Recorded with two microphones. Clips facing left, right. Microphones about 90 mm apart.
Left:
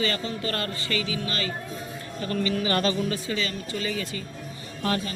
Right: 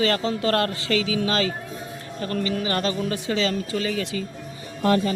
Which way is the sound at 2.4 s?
35° right (ahead or behind).